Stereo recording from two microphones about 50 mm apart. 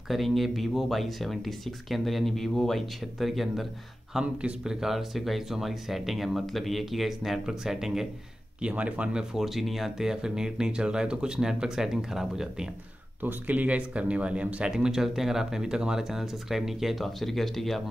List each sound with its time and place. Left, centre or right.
0.1 s speech: centre
4.2 s speech: right
4.7 s speech: centre
8.5 s speech: right
9.3 s speech: centre
13.2 s speech: right
14.7 s speech: centre